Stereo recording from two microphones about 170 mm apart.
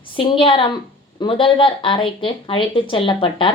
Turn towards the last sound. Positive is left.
turn(degrees=30)  # may be behind; listen again after turning